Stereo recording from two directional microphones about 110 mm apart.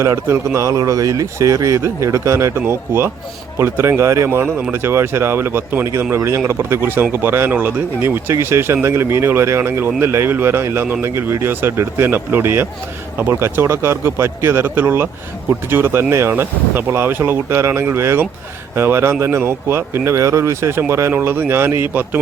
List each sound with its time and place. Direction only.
0.0 s speech: 25° right (ahead or behind)